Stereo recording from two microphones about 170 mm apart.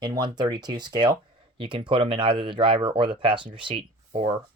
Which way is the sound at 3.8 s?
35° right (ahead or behind).